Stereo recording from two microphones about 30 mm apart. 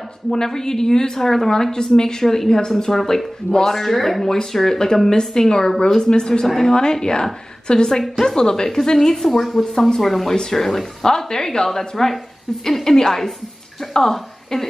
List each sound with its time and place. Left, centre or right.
0.3 s a woman's voice: centre
6.4 s a woman's voice: centre
6.7 s a woman's voice: left; by 9.7 s centre
9.8 s a woman's voice: centre
10.0 s a woman's voice: centre
11.1 s a woman's voice: left